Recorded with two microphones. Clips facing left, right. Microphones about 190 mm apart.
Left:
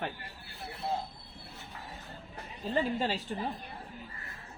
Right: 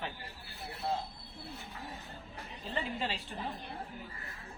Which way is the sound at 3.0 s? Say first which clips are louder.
Left 5 dB; 40° left (ahead or behind).